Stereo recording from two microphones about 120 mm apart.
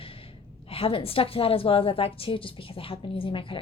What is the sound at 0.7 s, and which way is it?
A woman's voice, 50° left (ahead or behind).